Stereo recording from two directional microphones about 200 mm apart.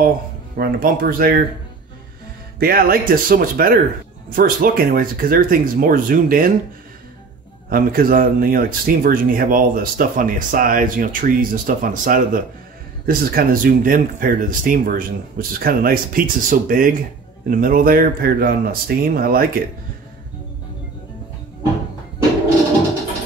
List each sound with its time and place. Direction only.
0.6 s speech: 50° right (ahead or behind)
2.6 s speech: 45° right (ahead or behind)
7.7 s speech: 45° right (ahead or behind)